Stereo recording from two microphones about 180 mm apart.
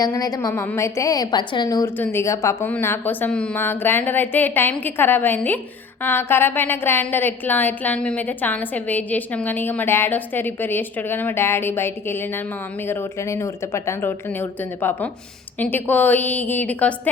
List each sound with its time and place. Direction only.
0.0 s a woman's voice: 20° left (ahead or behind)